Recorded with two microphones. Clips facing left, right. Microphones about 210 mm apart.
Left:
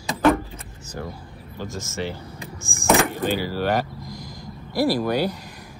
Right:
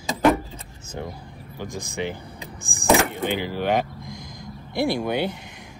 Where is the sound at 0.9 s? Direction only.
20° right (ahead or behind).